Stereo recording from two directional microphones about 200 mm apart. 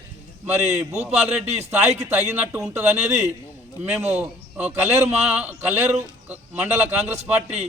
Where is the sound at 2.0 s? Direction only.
10° right (ahead or behind).